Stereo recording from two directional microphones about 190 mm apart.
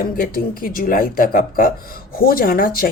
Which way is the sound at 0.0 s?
50° left (ahead or behind).